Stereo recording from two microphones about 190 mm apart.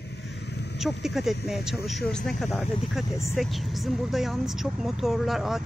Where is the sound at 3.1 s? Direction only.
15° left (ahead or behind).